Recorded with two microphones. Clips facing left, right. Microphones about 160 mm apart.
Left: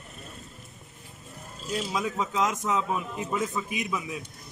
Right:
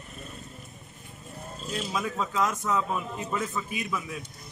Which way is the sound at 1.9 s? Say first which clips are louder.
Even; 15° left (ahead or behind).